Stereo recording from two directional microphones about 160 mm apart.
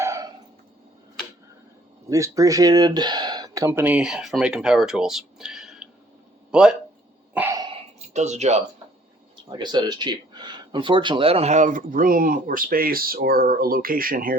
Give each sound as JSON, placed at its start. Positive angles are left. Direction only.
{"t": 0.0, "sound": "a sound", "side_deg": -20}
{"t": 2.0, "sound": "speech", "side_deg": -20}
{"t": 7.3, "sound": "cough", "side_deg": -15}
{"t": 8.1, "sound": "speech", "side_deg": -45}
{"t": 9.5, "sound": "speech", "side_deg": -30}